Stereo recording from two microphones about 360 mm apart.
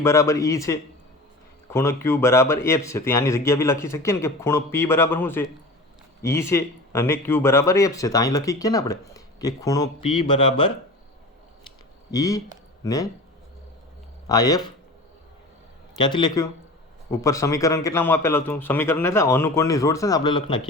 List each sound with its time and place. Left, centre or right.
0.0 s speech: centre
12.1 s speech: centre
14.3 s speech: centre
16.0 s speech: centre